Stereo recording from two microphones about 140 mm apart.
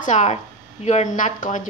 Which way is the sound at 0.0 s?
60° left (ahead or behind).